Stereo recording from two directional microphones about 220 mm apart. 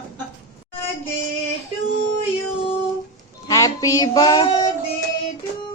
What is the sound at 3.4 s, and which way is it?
Music, 15° left (ahead or behind).